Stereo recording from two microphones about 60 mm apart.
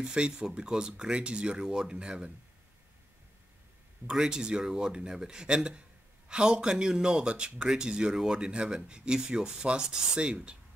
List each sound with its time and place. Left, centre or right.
0.0 s speech: centre
4.1 s speech: centre